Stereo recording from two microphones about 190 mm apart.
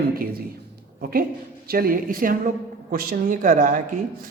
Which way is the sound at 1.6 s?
50° right (ahead or behind).